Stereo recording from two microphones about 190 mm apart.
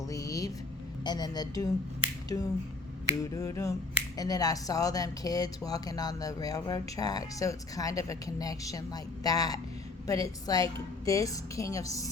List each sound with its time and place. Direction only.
0.1 s music: 15° left (ahead or behind)
1.0 s a woman's voice: 20° left (ahead or behind)